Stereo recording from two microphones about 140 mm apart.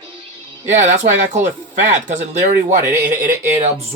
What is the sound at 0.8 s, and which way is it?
Speech, 60° right (ahead or behind).